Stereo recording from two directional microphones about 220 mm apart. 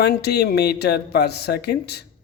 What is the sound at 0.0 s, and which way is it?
Speech, 45° left (ahead or behind).